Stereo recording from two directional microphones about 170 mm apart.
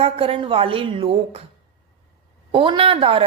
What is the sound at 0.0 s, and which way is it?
A woman's voice, 35° right (ahead or behind).